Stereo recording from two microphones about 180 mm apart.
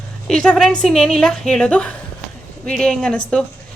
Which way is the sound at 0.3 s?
5° left (ahead or behind).